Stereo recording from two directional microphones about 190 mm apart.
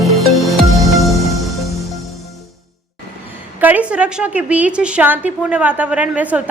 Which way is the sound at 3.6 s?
10° right (ahead or behind).